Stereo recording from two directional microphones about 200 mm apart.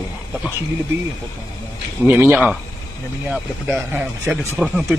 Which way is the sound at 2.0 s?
10° right (ahead or behind).